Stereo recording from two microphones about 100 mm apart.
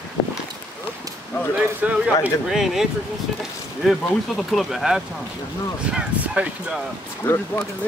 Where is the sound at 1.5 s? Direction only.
15° right (ahead or behind).